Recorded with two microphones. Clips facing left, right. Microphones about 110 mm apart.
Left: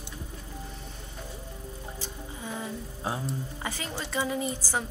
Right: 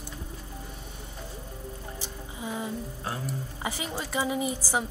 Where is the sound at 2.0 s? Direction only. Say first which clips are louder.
Right 2 dB; 15° right (ahead or behind).